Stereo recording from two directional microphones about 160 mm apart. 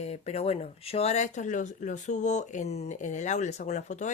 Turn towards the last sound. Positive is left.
turn(degrees=45)  # may be behind; listen again after turning